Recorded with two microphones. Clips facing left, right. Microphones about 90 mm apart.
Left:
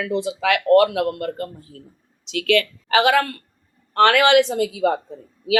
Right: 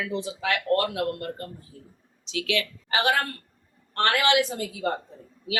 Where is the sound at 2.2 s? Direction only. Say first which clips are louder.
Left 8 dB; 60° left (ahead or behind); by 3.4 s 90° left.